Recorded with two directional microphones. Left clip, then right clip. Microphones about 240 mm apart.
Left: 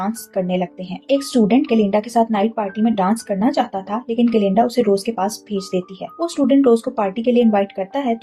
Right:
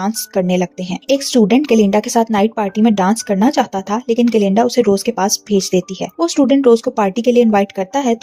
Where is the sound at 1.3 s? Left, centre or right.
Right.